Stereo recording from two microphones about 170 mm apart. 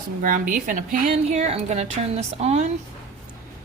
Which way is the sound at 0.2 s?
55° right (ahead or behind).